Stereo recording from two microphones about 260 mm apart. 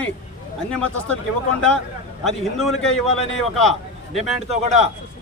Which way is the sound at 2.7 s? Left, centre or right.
Left.